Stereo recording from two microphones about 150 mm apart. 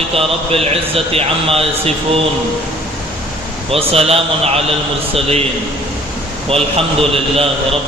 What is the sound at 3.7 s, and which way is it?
A man's voice, 40° right (ahead or behind).